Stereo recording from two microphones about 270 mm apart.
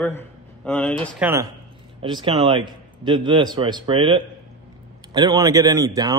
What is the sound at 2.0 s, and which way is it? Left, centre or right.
A man's voice, centre.